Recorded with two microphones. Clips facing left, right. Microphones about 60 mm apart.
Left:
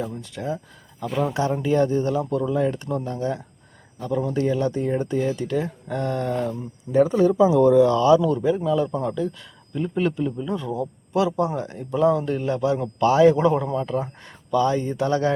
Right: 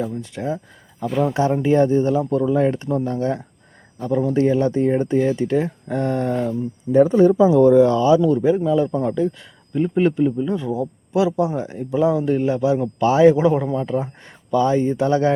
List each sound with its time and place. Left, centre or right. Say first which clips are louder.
0.2 s speech: right 3 dB; right
1.0 s speech: right 4 dB; centre
1.3 s speech: right 5 dB; right
10.4 s speech: right 4 dB; centre; by 15.3 s right